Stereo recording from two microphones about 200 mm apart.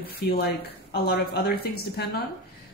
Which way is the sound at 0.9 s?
55° left (ahead or behind).